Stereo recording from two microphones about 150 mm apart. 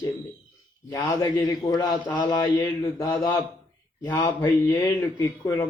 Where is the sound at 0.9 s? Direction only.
20° left (ahead or behind).